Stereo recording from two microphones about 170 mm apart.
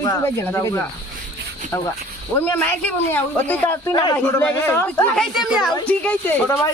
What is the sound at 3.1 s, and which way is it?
Speech, 10° left (ahead or behind).